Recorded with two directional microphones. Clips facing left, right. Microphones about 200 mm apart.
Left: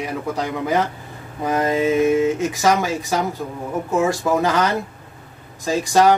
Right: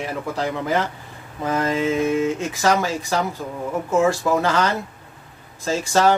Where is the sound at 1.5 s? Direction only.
15° left (ahead or behind).